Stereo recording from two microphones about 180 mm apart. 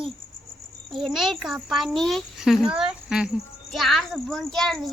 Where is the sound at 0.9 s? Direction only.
Centre (ahead or behind).